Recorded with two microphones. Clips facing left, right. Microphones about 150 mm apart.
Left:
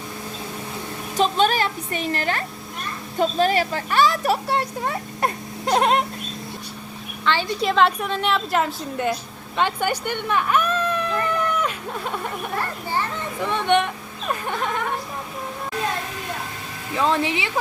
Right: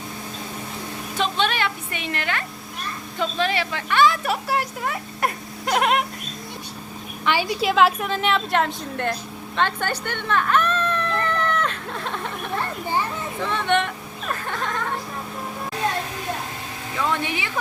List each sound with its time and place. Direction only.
1.1 s a woman's voice: 40° left (ahead or behind)
4.4 s speech: 25° left (ahead or behind)
7.3 s a woman's voice: 10° right (ahead or behind)
9.6 s a sound: 10° left (ahead or behind)
13.4 s speech: 15° left (ahead or behind)
17.0 s speech: 25° left (ahead or behind)